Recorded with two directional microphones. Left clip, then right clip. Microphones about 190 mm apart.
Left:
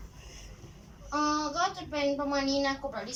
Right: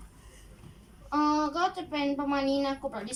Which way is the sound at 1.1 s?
5° right (ahead or behind).